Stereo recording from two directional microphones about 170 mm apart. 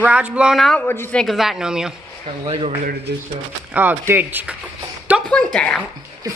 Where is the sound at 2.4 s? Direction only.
25° right (ahead or behind).